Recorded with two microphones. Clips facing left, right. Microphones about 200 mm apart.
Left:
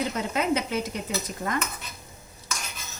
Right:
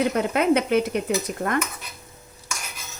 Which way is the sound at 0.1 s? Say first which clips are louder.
Right 6 dB; 60° right (ahead or behind).